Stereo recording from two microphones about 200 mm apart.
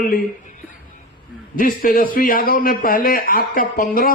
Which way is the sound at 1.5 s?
45° left (ahead or behind).